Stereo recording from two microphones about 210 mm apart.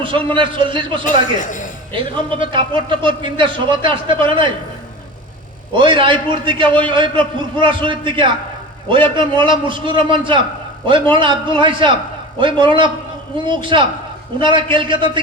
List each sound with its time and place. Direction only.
0.3 s speech: 25° right (ahead or behind)
1.0 s a man's voice: 35° left (ahead or behind)
2.4 s speech: 25° right (ahead or behind)
5.7 s speech: 25° right (ahead or behind)